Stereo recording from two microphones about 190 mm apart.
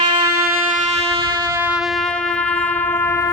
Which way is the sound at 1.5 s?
10° right (ahead or behind).